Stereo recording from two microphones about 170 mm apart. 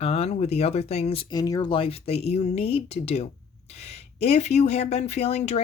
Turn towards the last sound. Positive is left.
turn(degrees=40)  # may be behind; listen again after turning